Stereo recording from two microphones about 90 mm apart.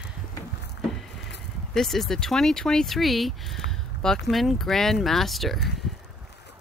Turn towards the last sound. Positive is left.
turn(degrees=0)  # may be behind; listen again after turning